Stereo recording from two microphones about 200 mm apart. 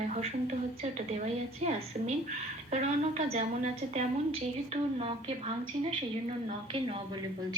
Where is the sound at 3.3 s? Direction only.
35° right (ahead or behind).